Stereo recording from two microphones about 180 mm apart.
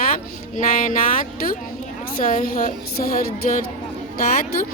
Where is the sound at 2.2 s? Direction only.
45° left (ahead or behind).